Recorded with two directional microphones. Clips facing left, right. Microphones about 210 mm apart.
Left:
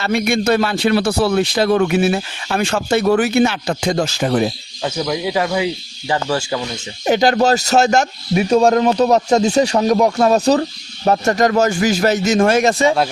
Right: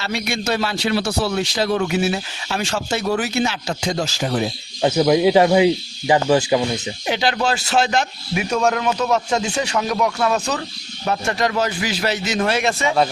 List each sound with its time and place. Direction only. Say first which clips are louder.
0.0 s a man's voice: left 7 dB; 55° left (ahead or behind)
4.8 s speech: right 6 dB; 25° right (ahead or behind)
7.0 s a man's voice: left 8 dB; 45° left (ahead or behind)
8.4 s a man's voice: left 6 dB; 30° left (ahead or behind)